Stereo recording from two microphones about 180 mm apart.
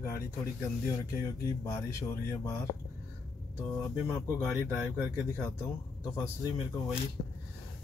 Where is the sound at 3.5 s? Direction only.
15° left (ahead or behind).